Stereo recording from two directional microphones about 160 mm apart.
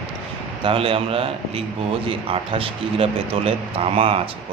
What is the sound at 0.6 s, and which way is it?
A man's voice, 35° right (ahead or behind).